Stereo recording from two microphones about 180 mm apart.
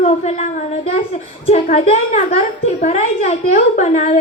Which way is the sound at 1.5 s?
35° left (ahead or behind).